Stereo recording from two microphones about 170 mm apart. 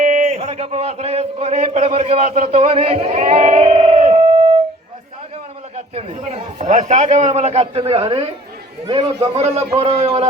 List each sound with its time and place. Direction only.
0.0 s a man's voice: 45° right (ahead or behind)
5.7 s a sound: 35° right (ahead or behind)
6.6 s a man's voice: 45° right (ahead or behind)